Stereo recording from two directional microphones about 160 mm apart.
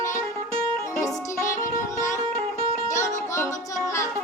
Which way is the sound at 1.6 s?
20° left (ahead or behind).